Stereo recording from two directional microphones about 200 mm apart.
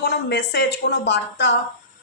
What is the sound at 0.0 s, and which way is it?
Speech, 60° left (ahead or behind).